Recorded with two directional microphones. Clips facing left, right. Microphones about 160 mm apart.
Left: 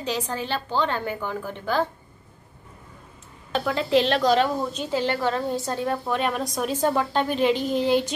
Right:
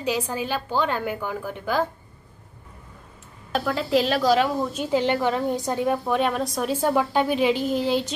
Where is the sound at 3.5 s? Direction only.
Centre (ahead or behind).